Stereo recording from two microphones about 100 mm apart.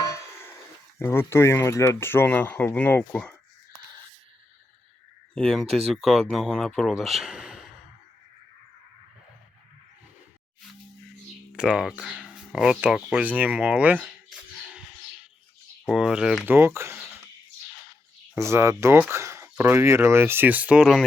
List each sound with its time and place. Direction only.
0.1 s speech: 25° left (ahead or behind)
5.3 s speech: 5° left (ahead or behind)
5.6 s speech: 75° right (ahead or behind)
5.9 s speech: centre (ahead or behind)
11.5 s speech: 10° right (ahead or behind)
14.5 s a sound: 10° right (ahead or behind)
15.9 s speech: 5° right (ahead or behind)
16.5 s speech: 25° right (ahead or behind)
18.3 s speech: 30° right (ahead or behind); by 21.0 s 10° right (ahead or behind)